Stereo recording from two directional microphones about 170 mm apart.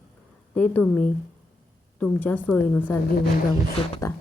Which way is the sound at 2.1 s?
10° left (ahead or behind).